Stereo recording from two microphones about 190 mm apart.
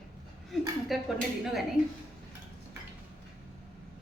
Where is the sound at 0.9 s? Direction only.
Centre (ahead or behind).